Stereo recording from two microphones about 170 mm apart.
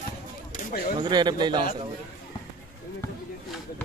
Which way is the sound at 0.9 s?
25° right (ahead or behind).